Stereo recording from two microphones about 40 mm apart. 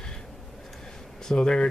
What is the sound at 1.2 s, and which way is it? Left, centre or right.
Speech, centre.